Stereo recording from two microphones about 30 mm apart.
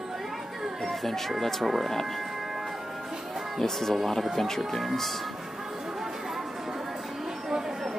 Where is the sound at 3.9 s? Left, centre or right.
Centre.